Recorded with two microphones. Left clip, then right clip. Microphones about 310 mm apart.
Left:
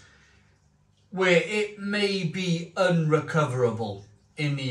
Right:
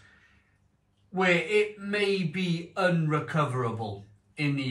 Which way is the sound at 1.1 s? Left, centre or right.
Centre.